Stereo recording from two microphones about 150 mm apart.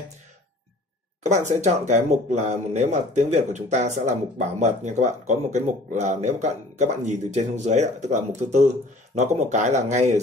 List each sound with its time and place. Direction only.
1.2 s speech: 50° right (ahead or behind)